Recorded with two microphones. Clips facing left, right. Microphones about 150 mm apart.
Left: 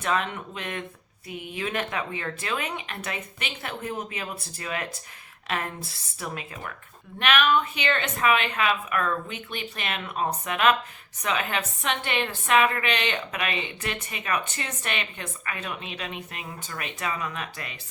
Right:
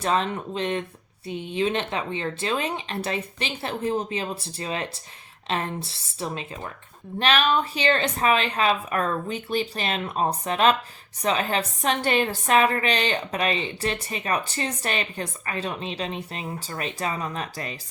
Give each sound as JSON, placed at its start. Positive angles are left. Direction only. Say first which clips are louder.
{"t": 0.0, "sound": "a woman's voice", "louder": "right 3 dB", "side_deg": -30}